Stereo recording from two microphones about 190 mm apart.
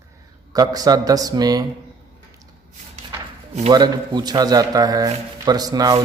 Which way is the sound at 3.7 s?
20° right (ahead or behind).